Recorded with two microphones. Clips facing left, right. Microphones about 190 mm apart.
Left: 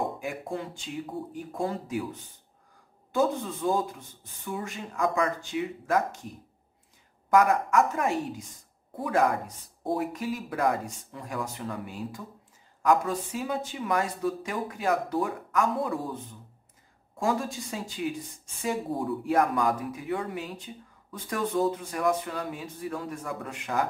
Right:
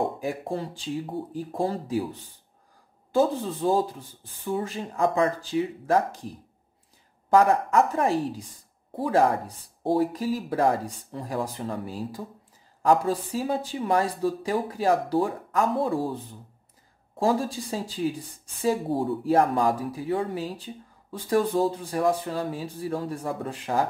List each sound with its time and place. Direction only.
0.2 s speech: 35° right (ahead or behind)
17.2 s speech: 35° right (ahead or behind)